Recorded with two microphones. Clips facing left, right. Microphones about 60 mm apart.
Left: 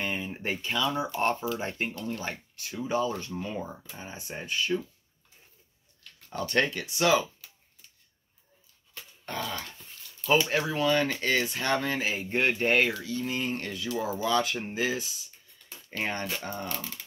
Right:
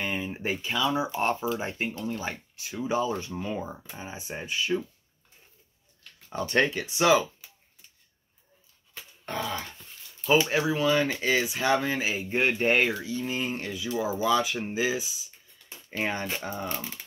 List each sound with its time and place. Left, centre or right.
0.0 s speech: centre
6.3 s speech: right
8.9 s dog: centre
10.4 s speech: centre
15.7 s a sound: right
16.4 s speech: centre